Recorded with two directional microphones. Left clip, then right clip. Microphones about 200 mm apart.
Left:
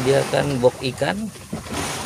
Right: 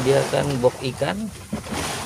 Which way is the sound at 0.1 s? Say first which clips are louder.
Left 1 dB; 10° left (ahead or behind).